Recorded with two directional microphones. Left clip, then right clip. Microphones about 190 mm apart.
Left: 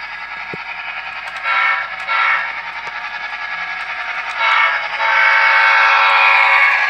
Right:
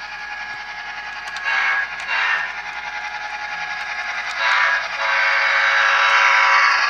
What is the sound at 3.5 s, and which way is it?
Train, 35° left (ahead or behind).